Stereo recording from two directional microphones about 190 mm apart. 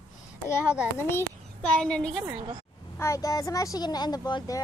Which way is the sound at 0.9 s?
10° left (ahead or behind).